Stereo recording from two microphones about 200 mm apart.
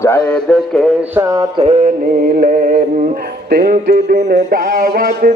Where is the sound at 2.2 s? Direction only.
45° right (ahead or behind).